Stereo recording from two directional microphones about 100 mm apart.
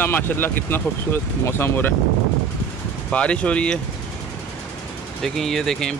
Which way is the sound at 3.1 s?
10° left (ahead or behind).